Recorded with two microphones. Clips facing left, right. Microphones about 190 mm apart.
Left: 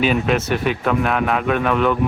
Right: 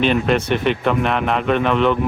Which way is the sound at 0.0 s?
5° left (ahead or behind).